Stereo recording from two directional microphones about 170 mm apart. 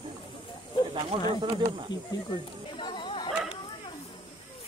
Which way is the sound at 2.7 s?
30° left (ahead or behind).